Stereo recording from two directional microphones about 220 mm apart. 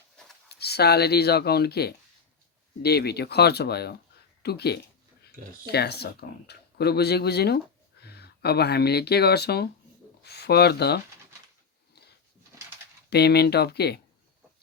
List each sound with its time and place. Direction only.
0.4 s speech: 45° left (ahead or behind)
13.1 s speech: 50° left (ahead or behind)